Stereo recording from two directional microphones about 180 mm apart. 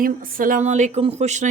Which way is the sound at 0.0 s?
50° right (ahead or behind).